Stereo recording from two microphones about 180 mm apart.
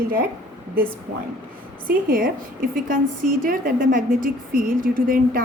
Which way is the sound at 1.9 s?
50° right (ahead or behind).